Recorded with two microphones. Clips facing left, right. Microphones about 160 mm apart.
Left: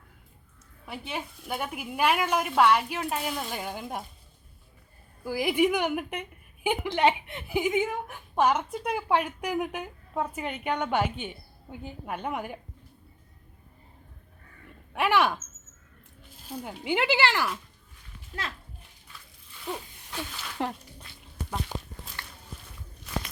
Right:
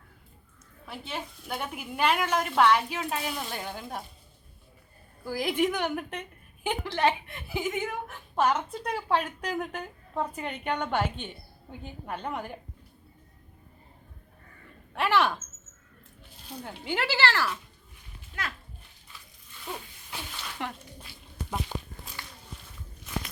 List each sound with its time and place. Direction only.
0.9 s a woman's voice: 10° left (ahead or behind)
5.2 s a woman's voice: 10° left (ahead or behind)
14.9 s speech: 10° left (ahead or behind)
16.5 s a woman's voice: 10° left (ahead or behind)
18.3 s a child's voice: 40° left (ahead or behind)
19.7 s a sound: centre (ahead or behind)
20.6 s a child's voice: 35° left (ahead or behind)
21.7 s walk: 15° left (ahead or behind)